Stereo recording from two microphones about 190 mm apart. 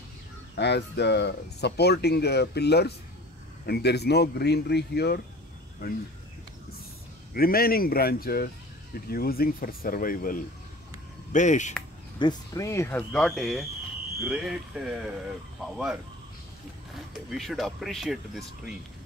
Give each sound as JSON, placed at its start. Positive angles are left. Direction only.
{"t": 0.6, "sound": "speech", "side_deg": 60}
{"t": 7.3, "sound": "speech", "side_deg": 50}
{"t": 12.2, "sound": "speech", "side_deg": 20}
{"t": 17.1, "sound": "speech", "side_deg": 0}